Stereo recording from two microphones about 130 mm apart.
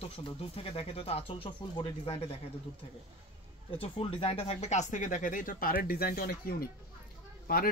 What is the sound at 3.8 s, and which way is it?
Speech, 45° left (ahead or behind).